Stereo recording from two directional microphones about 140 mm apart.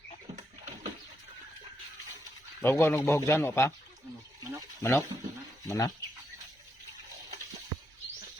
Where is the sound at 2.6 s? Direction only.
15° left (ahead or behind).